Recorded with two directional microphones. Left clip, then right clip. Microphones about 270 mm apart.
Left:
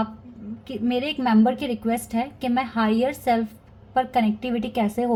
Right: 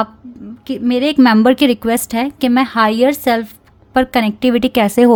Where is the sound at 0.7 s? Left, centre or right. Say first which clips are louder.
Right 9 dB; right.